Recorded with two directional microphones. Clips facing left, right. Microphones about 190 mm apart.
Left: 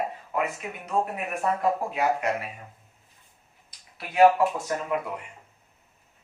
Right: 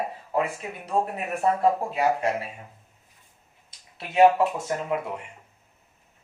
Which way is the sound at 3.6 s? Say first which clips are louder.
Right 1 dB; 25° right (ahead or behind).